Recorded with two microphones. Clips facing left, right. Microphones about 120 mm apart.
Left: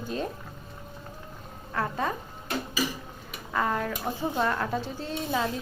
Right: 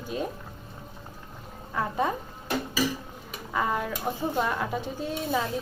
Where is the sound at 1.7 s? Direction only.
15° right (ahead or behind).